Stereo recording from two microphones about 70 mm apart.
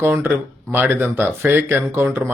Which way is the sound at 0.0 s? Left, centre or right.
Right.